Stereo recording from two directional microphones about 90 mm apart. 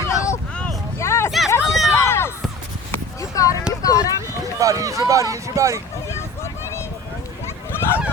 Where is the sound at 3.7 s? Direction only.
35° left (ahead or behind).